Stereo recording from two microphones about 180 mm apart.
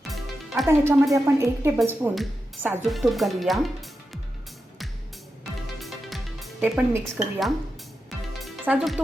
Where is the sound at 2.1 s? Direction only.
Centre (ahead or behind).